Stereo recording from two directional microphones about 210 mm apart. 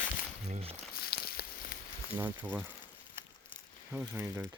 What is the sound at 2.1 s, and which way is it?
Speech, 10° right (ahead or behind).